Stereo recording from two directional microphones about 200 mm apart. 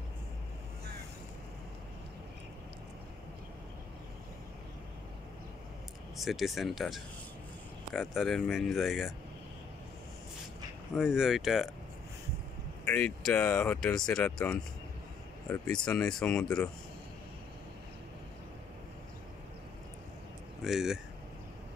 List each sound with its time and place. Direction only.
6.1 s speech: centre (ahead or behind)
11.0 s speech: centre (ahead or behind)
12.8 s speech: 5° left (ahead or behind)
20.6 s speech: centre (ahead or behind)